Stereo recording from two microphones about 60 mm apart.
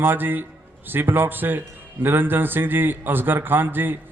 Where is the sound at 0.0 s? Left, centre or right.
Right.